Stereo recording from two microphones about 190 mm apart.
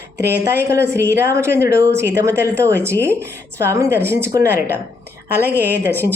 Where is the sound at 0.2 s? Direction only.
60° right (ahead or behind).